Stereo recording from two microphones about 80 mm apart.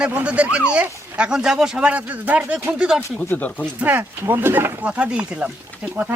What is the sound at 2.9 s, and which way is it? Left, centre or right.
Speech, centre.